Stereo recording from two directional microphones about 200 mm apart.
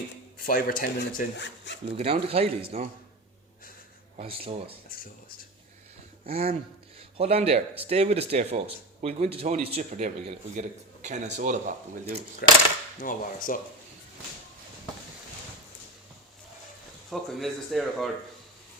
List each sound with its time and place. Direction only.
0.3 s speech: 45° left (ahead or behind); by 1.8 s 60° left (ahead or behind)
1.9 s speech: 30° right (ahead or behind)
4.2 s speech: 30° right (ahead or behind)
6.2 s speech: 30° right (ahead or behind)
12.4 s speech: 50° left (ahead or behind)
17.1 s speech: centre (ahead or behind)